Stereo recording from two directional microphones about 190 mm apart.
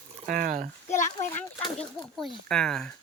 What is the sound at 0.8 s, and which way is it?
Speech, 40° left (ahead or behind).